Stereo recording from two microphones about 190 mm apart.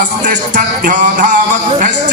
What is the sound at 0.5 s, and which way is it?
Music, 40° right (ahead or behind).